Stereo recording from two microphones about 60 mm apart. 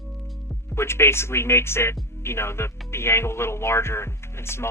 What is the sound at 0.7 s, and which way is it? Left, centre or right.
Speech, left.